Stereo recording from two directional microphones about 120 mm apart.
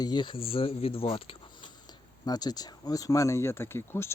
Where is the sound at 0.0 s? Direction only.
40° left (ahead or behind).